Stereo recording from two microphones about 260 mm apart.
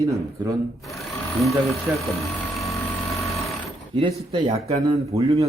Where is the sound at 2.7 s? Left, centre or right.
Centre.